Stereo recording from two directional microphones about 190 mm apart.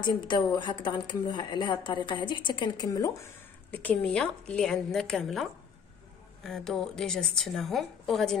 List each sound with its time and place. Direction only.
0.0 s a woman's voice: 25° left (ahead or behind); by 8.4 s centre (ahead or behind)